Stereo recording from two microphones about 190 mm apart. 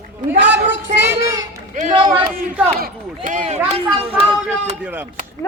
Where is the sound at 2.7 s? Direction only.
50° right (ahead or behind); by 4.2 s 30° right (ahead or behind).